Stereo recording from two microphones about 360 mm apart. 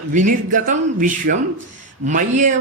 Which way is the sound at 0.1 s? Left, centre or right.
Right.